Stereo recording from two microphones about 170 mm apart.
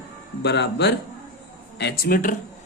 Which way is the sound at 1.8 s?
70° left (ahead or behind).